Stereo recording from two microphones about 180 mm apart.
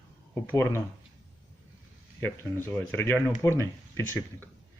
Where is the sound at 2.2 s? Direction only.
10° left (ahead or behind).